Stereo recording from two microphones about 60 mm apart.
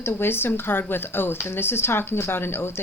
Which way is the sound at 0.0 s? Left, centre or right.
Left.